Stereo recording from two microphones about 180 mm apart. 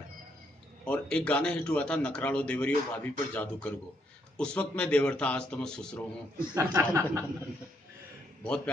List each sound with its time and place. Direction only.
0.8 s a man's voice: 5° left (ahead or behind)
6.5 s speech: 20° right (ahead or behind)